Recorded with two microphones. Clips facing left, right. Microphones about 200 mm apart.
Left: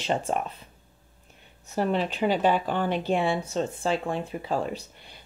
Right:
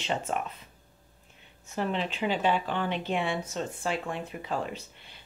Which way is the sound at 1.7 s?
45° left (ahead or behind).